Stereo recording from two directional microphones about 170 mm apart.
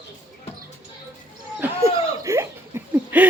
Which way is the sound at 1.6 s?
15° right (ahead or behind).